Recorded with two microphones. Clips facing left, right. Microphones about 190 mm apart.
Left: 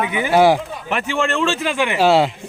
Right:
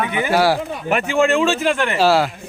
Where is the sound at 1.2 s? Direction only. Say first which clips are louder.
Right 4 dB; 5° right (ahead or behind).